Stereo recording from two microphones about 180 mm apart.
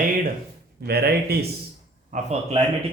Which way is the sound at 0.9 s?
60° right (ahead or behind).